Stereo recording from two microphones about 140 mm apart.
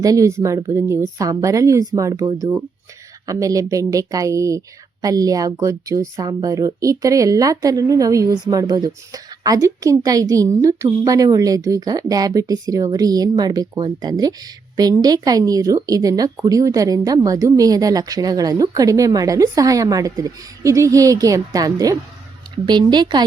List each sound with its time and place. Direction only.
0.0 s a woman's voice: 25° right (ahead or behind)